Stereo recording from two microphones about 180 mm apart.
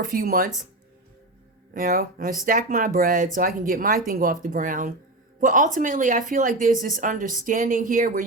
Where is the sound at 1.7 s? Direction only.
55° right (ahead or behind).